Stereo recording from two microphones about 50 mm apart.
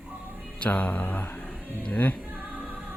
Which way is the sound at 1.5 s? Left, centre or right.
Left.